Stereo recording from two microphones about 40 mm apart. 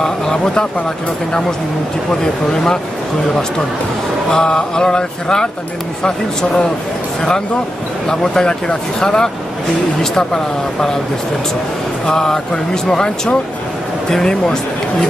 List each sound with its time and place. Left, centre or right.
0.0 s speech: centre
2.5 s speech: centre
4.3 s speech: centre
8.1 s speech: centre
12.1 s speech: centre